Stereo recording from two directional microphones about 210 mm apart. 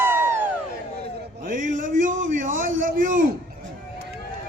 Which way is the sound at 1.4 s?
40° right (ahead or behind).